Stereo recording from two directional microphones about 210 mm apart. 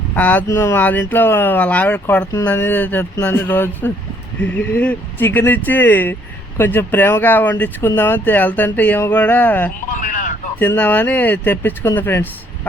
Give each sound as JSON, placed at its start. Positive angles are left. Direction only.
{"t": 0.2, "sound": "speech", "side_deg": 5}
{"t": 9.9, "sound": "a sound", "side_deg": 35}
{"t": 10.6, "sound": "speech", "side_deg": 10}